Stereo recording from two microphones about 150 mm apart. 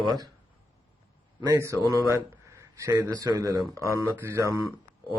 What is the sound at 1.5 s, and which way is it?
A man's voice, 20° right (ahead or behind).